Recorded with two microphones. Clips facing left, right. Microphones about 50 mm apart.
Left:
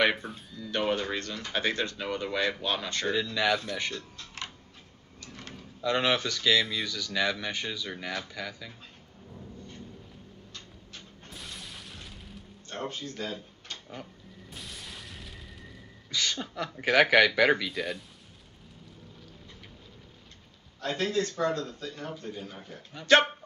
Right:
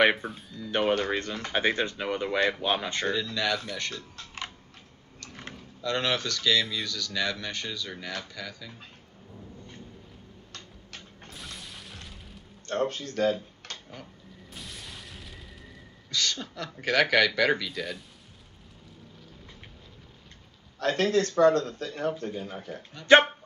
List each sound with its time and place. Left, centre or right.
0.2 s speech: centre
0.7 s speech: right
3.1 s speech: centre
5.8 s speech: centre
10.9 s vehicle: right
11.3 s a sound: centre
12.6 s speech: right
14.5 s boom: centre
16.1 s speech: centre
20.8 s speech: right
23.0 s speech: centre